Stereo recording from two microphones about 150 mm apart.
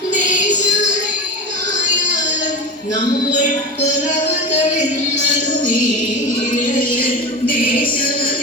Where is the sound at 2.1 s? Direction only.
55° left (ahead or behind).